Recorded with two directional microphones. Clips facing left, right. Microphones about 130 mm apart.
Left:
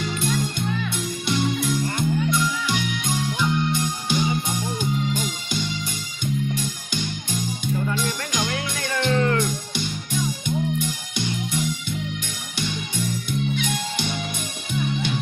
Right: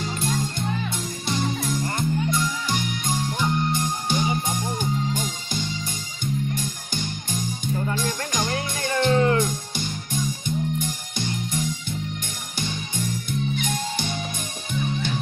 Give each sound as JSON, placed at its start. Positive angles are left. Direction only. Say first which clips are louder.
{"t": 0.0, "sound": "music", "louder": "left 2 dB", "side_deg": -35}
{"t": 7.9, "sound": "music", "louder": "even", "side_deg": -40}
{"t": 10.8, "sound": "music", "louder": "left 2 dB", "side_deg": -45}
{"t": 13.6, "sound": "music", "louder": "left 1 dB", "side_deg": -45}